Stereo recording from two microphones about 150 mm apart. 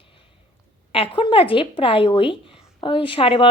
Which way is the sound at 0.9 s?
35° left (ahead or behind).